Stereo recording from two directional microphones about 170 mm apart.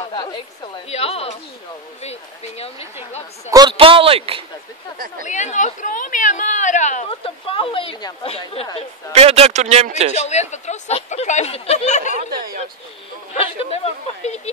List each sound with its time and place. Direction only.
0.0 s a sound: 25° left (ahead or behind)
0.8 s speech: 35° left (ahead or behind)
3.4 s a man's voice: 20° right (ahead or behind)
5.2 s speech: 45° left (ahead or behind)
7.1 s speech: 35° left (ahead or behind)
9.1 s speech: 35° right (ahead or behind)
10.1 s speech: 40° left (ahead or behind)
12.3 s speech: 60° right (ahead or behind)
13.3 s speech: 35° left (ahead or behind)